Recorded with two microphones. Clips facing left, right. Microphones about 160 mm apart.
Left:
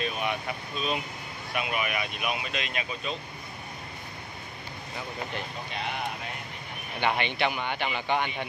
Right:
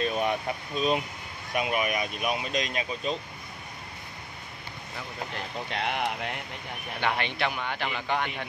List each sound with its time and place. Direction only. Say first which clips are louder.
0.0 s vehicle: right 4 dB; 35° right (ahead or behind)
1.5 s speech: right 3 dB; 40° right (ahead or behind)
5.7 s speech: right 5 dB; 70° right (ahead or behind)
7.0 s speech: left 2 dB; centre (ahead or behind)